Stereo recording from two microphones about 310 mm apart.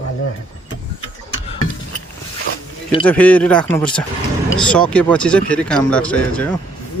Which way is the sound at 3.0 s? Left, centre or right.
Centre.